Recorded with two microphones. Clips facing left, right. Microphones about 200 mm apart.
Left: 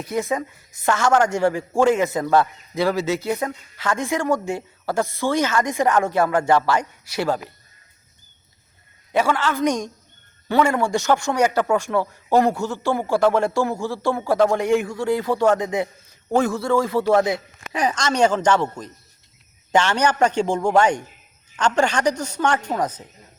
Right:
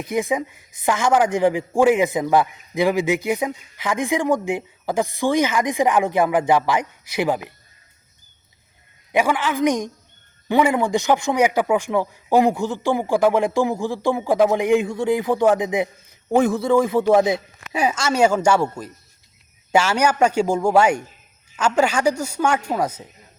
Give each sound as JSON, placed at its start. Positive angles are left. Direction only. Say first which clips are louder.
{"t": 0.0, "sound": "speech", "louder": "right 2 dB", "side_deg": -15}
{"t": 9.1, "sound": "speech", "louder": "right 1 dB", "side_deg": -15}
{"t": 17.7, "sound": "speech", "louder": "right 1 dB", "side_deg": -10}